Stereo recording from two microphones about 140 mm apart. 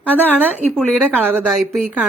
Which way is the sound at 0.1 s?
15° right (ahead or behind).